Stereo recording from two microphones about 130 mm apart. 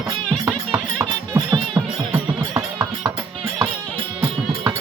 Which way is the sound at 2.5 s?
20° right (ahead or behind).